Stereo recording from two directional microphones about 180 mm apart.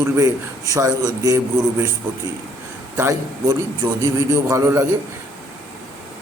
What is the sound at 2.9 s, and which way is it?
A man's voice, 20° right (ahead or behind).